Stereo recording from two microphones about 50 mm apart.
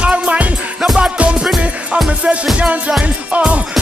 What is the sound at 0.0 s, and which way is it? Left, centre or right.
Music, right.